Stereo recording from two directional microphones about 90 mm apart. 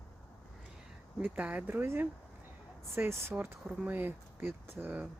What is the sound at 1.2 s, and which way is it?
Speech, 15° right (ahead or behind).